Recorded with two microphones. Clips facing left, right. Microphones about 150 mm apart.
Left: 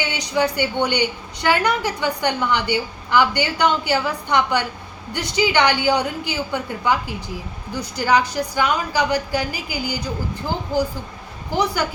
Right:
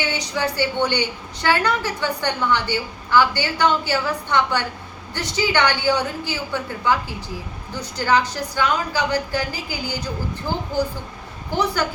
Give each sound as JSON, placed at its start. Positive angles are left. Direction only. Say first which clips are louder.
{"t": 0.1, "sound": "a woman's voice", "louder": "left 3 dB", "side_deg": 15}
{"t": 11.5, "sound": "a woman's voice", "louder": "left 1 dB", "side_deg": 10}